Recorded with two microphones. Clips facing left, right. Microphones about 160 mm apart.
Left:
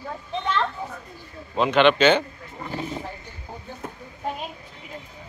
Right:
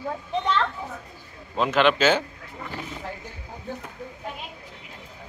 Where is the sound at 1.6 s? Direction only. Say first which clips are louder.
Left 3 dB; centre (ahead or behind).